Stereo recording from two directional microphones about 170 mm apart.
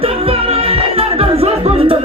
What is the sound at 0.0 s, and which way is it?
Music, 35° right (ahead or behind).